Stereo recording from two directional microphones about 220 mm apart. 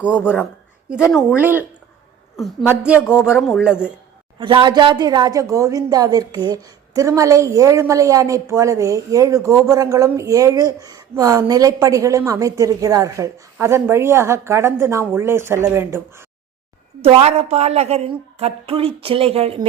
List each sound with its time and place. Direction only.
0.0 s speech: 5° right (ahead or behind)
2.6 s a woman's voice: 5° right (ahead or behind)
3.1 s speech: 10° left (ahead or behind)
3.4 s speech: centre (ahead or behind)
4.4 s a woman's voice: 20° right (ahead or behind)
17.0 s a woman's voice: 25° right (ahead or behind)